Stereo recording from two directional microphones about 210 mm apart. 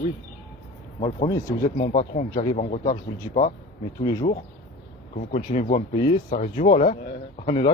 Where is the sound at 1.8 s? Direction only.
40° left (ahead or behind).